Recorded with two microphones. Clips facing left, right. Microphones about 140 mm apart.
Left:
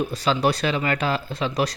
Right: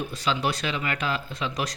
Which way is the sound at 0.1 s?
40° left (ahead or behind).